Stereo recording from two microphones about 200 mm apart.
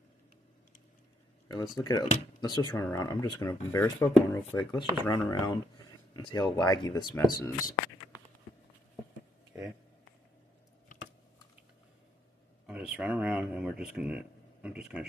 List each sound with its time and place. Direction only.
1.5 s speech: 20° left (ahead or behind)
5.3 s speech: 25° left (ahead or behind)
12.6 s speech: 5° right (ahead or behind)